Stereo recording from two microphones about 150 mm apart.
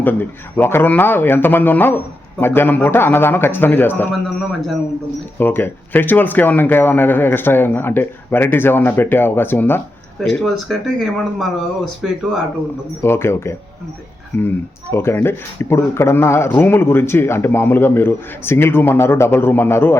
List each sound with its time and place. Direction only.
0.0 s speech: 10° left (ahead or behind)
4.4 s speech: centre (ahead or behind)
5.4 s speech: 10° left (ahead or behind)
10.2 s speech: 5° left (ahead or behind)
13.0 s speech: 15° left (ahead or behind)